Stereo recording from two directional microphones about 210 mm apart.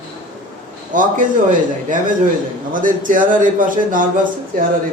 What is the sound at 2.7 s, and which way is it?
A man's voice, 40° right (ahead or behind).